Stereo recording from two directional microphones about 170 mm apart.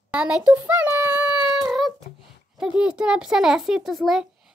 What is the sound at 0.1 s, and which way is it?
Child singing, 5° right (ahead or behind).